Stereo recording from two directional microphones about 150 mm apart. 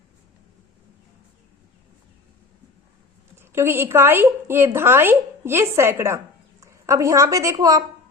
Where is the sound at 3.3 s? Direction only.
15° right (ahead or behind).